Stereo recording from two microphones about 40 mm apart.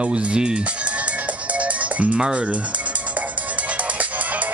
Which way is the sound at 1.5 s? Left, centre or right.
Right.